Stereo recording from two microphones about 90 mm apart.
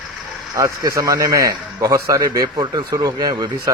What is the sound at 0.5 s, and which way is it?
Speech, 40° right (ahead or behind).